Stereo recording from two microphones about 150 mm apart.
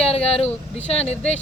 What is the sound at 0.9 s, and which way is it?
Speech, 40° left (ahead or behind).